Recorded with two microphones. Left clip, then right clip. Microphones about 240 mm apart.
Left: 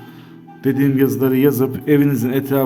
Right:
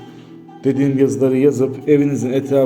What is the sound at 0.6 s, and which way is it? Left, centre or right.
Speech, left.